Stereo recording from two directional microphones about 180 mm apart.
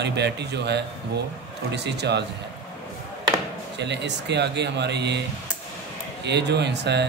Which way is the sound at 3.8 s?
75° right (ahead or behind).